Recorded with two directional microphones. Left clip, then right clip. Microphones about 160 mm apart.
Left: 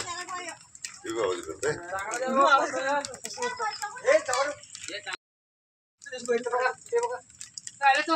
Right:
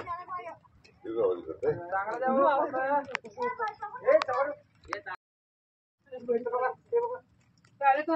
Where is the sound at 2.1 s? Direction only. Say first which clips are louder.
Left 4 dB; 5° left (ahead or behind).